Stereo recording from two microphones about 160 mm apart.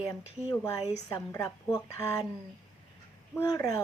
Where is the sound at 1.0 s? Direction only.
20° left (ahead or behind).